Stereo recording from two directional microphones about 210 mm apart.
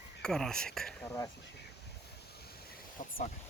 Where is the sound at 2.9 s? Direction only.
40° left (ahead or behind).